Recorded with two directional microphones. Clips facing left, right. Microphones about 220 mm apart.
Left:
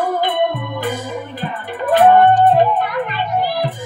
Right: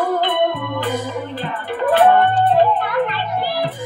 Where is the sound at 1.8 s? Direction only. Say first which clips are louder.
Left 3 dB; 15° left (ahead or behind).